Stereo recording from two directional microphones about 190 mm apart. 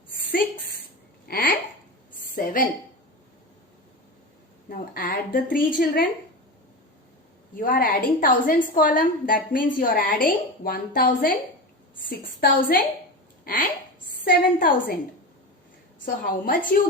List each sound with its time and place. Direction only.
1.3 s a sound: 50° left (ahead or behind)
2.3 s a woman's voice: 45° left (ahead or behind)
4.7 s a woman's voice: 45° left (ahead or behind)
7.5 s a woman's voice: 45° left (ahead or behind)
12.4 s a woman's voice: 50° left (ahead or behind)
16.0 s a woman's voice: 45° left (ahead or behind)